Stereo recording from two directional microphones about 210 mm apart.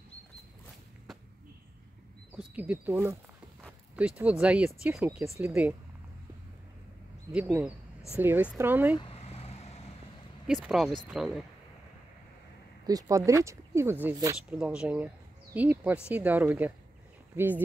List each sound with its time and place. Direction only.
2.3 s speech: 5° right (ahead or behind)
7.3 s speech: 5° right (ahead or behind)
8.9 s vehicle: 25° left (ahead or behind)
10.4 s speech: 5° right (ahead or behind)
12.8 s speech: 15° right (ahead or behind)